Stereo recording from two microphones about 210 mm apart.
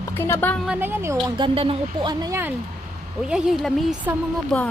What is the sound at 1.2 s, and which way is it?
Speech, 25° right (ahead or behind).